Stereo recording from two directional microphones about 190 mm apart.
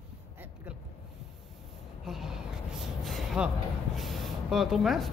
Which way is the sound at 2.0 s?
Centre (ahead or behind).